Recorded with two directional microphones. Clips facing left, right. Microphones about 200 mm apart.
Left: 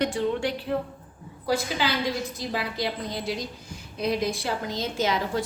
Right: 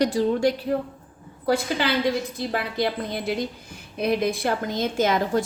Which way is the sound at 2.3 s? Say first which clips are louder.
Right 3 dB; 55° right (ahead or behind).